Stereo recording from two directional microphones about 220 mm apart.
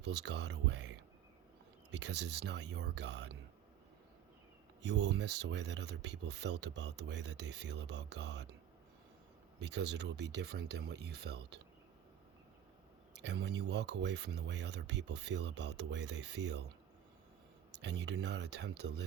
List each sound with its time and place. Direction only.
0.0 s speech: 50° right (ahead or behind)
4.8 s speech: 55° right (ahead or behind)
9.6 s speech: 50° right (ahead or behind)
13.1 s speech: 50° right (ahead or behind)
17.8 s speech: 50° right (ahead or behind)